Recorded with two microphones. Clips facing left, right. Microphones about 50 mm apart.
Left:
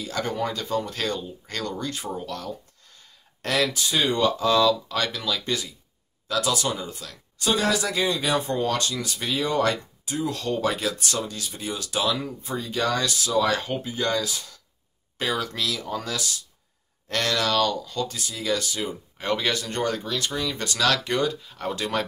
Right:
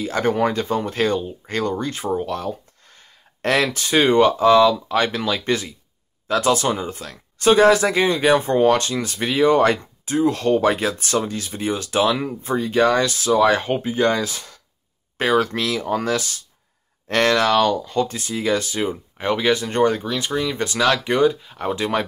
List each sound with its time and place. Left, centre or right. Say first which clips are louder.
0.0 s speech: right 8 dB; right
19.2 s speech: right 6 dB; right